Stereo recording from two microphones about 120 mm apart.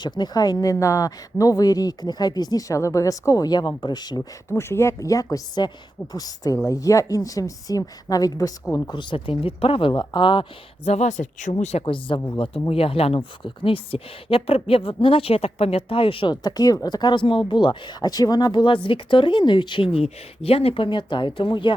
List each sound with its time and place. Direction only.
0.0 s speech: 35° left (ahead or behind)
4.4 s a woman's voice: 20° left (ahead or behind); by 9.9 s 50° left (ahead or behind)
9.9 s speech: 40° left (ahead or behind)
10.8 s a woman's voice: 75° left (ahead or behind); by 11.5 s 90° left
11.9 s speech: 50° left (ahead or behind)